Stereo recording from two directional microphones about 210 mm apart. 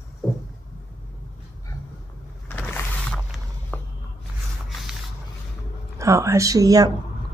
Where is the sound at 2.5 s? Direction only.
10° left (ahead or behind).